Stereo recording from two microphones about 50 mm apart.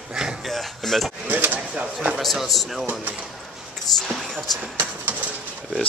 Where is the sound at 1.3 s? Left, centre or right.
Right.